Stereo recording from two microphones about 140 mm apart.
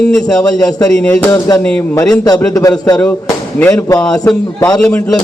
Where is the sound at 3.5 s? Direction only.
15° left (ahead or behind).